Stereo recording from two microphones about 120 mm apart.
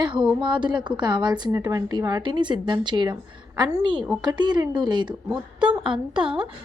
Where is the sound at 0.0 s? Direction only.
40° right (ahead or behind).